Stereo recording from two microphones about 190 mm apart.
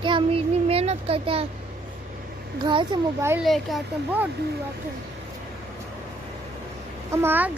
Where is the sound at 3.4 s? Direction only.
Centre (ahead or behind).